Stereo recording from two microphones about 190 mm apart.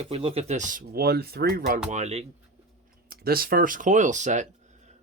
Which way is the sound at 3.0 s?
50° right (ahead or behind).